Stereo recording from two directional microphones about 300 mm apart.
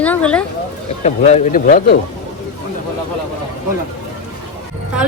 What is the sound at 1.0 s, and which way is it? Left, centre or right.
Speech, left.